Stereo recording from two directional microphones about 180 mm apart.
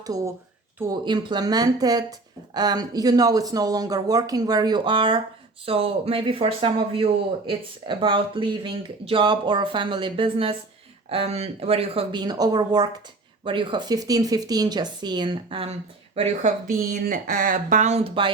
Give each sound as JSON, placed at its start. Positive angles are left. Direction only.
{"t": 0.0, "sound": "speech", "side_deg": -20}
{"t": 16.7, "sound": "speech", "side_deg": -50}